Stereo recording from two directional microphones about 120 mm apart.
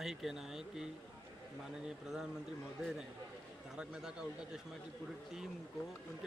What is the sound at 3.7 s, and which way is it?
Speech, 5° right (ahead or behind).